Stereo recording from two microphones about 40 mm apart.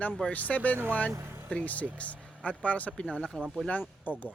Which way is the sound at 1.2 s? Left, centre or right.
Right.